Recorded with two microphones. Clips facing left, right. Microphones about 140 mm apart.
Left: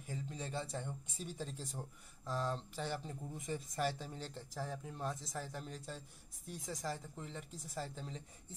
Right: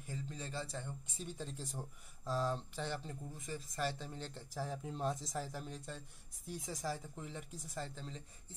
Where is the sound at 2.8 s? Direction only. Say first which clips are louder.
Even; 10° left (ahead or behind); by 4.8 s 5° right (ahead or behind).